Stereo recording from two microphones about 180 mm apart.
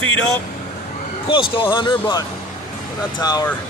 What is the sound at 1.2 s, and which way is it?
Speech, 30° left (ahead or behind).